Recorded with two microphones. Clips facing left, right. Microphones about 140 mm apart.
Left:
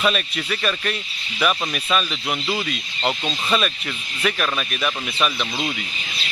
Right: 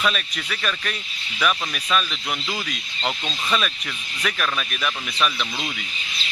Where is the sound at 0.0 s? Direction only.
10° left (ahead or behind).